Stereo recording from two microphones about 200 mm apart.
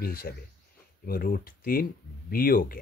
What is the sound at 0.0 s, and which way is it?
Speech, 50° left (ahead or behind).